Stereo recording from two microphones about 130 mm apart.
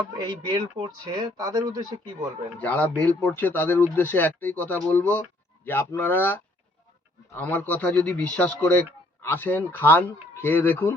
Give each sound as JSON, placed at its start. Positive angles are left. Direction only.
{"t": 0.3, "sound": "speech", "side_deg": -40}
{"t": 2.6, "sound": "speech", "side_deg": 10}